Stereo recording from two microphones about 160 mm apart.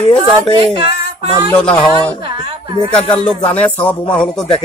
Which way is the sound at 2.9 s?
35° left (ahead or behind).